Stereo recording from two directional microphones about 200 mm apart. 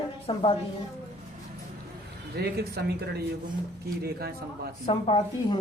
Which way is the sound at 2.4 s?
55° right (ahead or behind).